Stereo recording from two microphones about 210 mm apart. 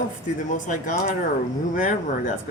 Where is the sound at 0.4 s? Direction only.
40° left (ahead or behind).